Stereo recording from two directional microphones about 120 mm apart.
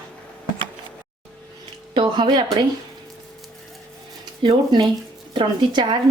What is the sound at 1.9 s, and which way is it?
Speech, 40° right (ahead or behind).